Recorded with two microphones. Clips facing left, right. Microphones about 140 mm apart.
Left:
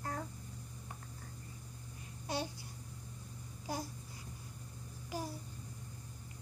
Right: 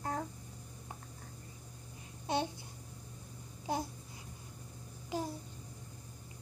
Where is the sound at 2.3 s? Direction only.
25° right (ahead or behind).